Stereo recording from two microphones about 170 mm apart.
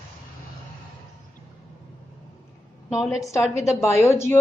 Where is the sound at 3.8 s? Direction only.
15° left (ahead or behind).